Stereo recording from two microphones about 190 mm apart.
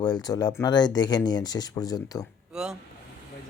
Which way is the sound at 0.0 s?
20° left (ahead or behind).